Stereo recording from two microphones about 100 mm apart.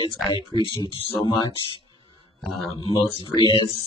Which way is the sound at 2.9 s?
50° left (ahead or behind).